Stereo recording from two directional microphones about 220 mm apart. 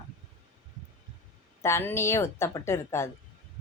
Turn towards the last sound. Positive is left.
turn(degrees=10)  # may be behind; listen again after turning